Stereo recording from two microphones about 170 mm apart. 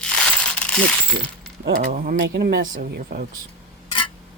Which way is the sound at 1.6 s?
55° right (ahead or behind).